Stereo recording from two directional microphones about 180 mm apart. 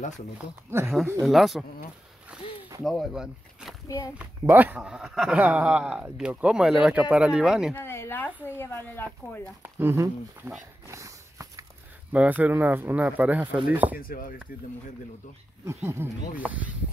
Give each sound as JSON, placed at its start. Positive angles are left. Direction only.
{"t": 0.7, "sound": "speech", "side_deg": -15}
{"t": 1.2, "sound": "a man's voice", "side_deg": 0}
{"t": 7.7, "sound": "a woman's voice", "side_deg": 15}
{"t": 9.6, "sound": "speech", "side_deg": -10}
{"t": 10.9, "sound": "snort", "side_deg": -15}
{"t": 12.1, "sound": "speech", "side_deg": -10}
{"t": 13.9, "sound": "speech", "side_deg": 50}
{"t": 15.6, "sound": "speech", "side_deg": -15}